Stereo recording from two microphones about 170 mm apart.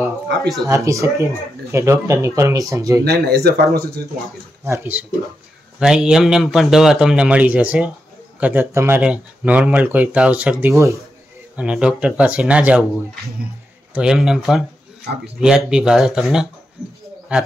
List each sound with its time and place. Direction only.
0.7 s speech: 20° right (ahead or behind)
3.0 s speech: 70° right (ahead or behind)
4.6 s a man's voice: 15° right (ahead or behind)
11.5 s a man's voice: 5° right (ahead or behind)